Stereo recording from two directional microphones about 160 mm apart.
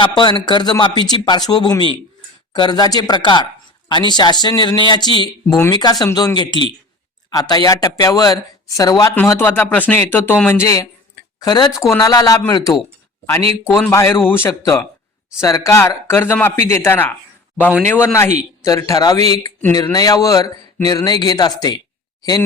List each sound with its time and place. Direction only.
0.0 s speech: 30° left (ahead or behind)
13.9 s speech: 15° left (ahead or behind)